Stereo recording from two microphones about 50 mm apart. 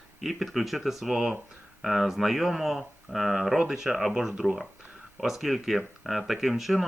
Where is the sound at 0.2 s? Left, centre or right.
Centre.